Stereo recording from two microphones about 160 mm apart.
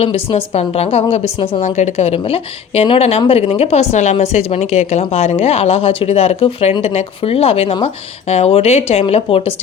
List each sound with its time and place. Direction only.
0.0 s speech: 35° left (ahead or behind)
1.6 s speech: 45° left (ahead or behind)